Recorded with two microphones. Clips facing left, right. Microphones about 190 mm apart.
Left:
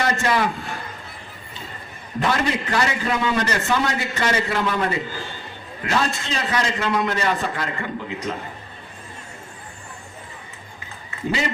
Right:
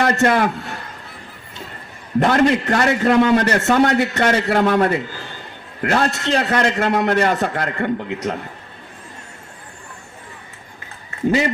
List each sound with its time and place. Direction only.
0.0 s a man's voice: 55° right (ahead or behind)
2.1 s a man's voice: 55° right (ahead or behind)